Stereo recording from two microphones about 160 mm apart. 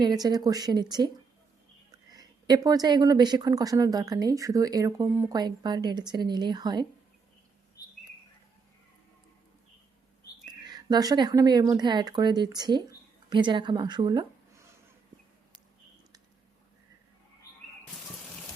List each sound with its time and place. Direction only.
0.0 s speech: 25° right (ahead or behind)
5.4 s speech: 25° right (ahead or behind)
10.4 s speech: 25° right (ahead or behind)